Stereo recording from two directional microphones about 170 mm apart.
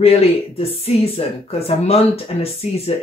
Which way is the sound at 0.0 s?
35° left (ahead or behind).